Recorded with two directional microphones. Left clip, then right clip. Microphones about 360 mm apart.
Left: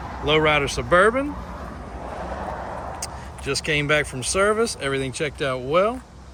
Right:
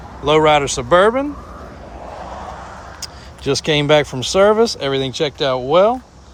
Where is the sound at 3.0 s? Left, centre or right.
Centre.